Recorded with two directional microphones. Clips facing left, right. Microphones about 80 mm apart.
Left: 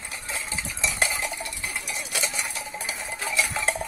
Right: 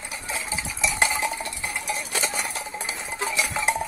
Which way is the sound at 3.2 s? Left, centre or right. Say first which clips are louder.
Right 1 dB; right.